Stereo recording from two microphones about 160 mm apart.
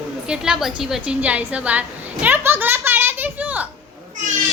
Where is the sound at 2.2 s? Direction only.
15° right (ahead or behind).